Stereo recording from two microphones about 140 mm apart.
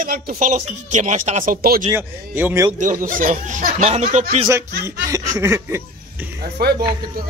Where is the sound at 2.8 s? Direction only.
70° right (ahead or behind).